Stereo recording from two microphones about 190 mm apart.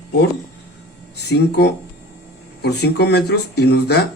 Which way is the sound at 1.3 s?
65° left (ahead or behind).